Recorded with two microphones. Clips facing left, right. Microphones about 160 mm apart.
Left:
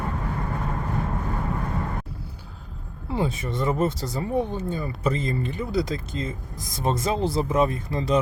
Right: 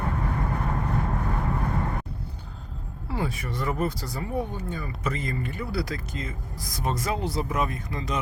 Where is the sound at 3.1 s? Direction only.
25° left (ahead or behind).